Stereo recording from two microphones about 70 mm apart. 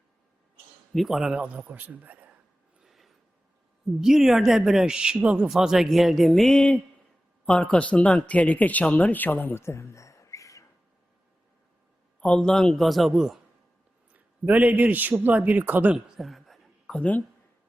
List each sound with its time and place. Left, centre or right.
0.9 s speech: centre
1.4 s a man's voice: right
2.8 s a sound: centre
4.0 s a woman's voice: centre
5.5 s speech: centre; by 9.6 s left
9.6 s a sound: left
12.2 s speech: centre
14.1 s a man's voice: right
16.0 s a sound: centre
16.8 s speech: centre